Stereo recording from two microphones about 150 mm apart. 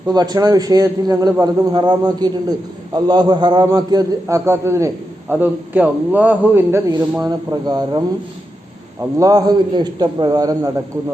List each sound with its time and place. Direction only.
0.1 s a man's voice: 25° right (ahead or behind)
9.1 s a man's voice: 25° right (ahead or behind)